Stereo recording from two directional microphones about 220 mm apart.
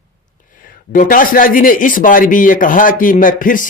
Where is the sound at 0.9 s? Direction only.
40° left (ahead or behind).